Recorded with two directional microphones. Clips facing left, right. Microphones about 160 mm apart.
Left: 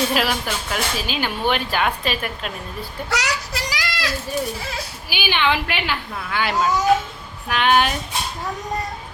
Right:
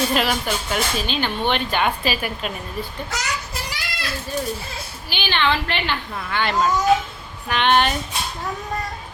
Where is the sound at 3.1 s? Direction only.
75° left (ahead or behind); by 4.1 s 90° left.